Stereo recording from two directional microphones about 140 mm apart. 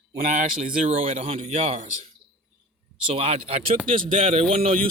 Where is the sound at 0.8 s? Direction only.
45° right (ahead or behind).